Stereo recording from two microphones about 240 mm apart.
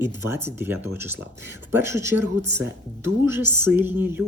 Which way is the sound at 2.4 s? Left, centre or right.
Right.